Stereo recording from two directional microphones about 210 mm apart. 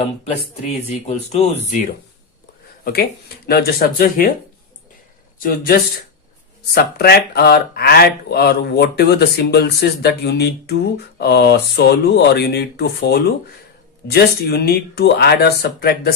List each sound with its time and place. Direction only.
0.0 s speech: 30° left (ahead or behind)
2.8 s speech: 50° left (ahead or behind)
5.4 s speech: 45° left (ahead or behind)